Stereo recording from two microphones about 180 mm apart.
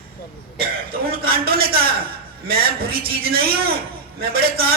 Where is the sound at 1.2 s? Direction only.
55° right (ahead or behind).